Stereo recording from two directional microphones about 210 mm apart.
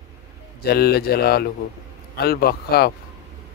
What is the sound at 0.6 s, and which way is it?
Speech, 50° left (ahead or behind).